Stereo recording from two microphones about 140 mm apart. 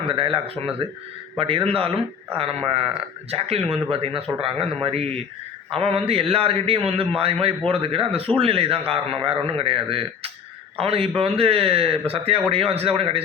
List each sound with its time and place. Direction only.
0.1 s speech: 35° right (ahead or behind)